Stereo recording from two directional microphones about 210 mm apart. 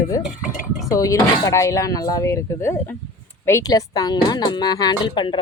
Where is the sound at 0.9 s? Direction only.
15° left (ahead or behind).